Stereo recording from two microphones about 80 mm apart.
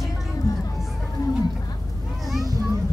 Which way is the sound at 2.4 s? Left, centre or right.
Right.